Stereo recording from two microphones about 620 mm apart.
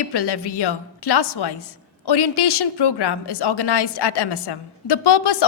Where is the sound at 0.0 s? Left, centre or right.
Left.